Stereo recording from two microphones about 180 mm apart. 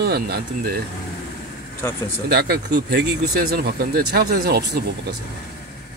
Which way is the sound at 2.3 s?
60° right (ahead or behind).